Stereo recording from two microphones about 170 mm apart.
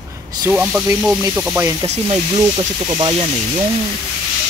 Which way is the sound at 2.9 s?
30° right (ahead or behind).